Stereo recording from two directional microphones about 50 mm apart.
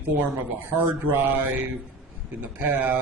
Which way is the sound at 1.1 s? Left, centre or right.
Right.